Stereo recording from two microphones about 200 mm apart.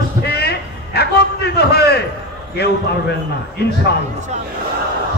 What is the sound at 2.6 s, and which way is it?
Speech, 55° left (ahead or behind).